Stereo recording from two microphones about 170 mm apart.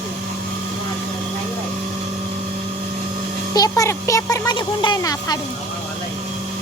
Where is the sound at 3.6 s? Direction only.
20° left (ahead or behind).